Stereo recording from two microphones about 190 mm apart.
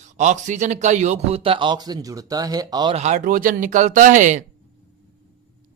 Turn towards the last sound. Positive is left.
turn(degrees=-40)  # may be behind; listen again after turning